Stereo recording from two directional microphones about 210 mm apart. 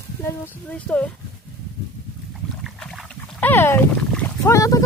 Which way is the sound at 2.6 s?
Centre (ahead or behind).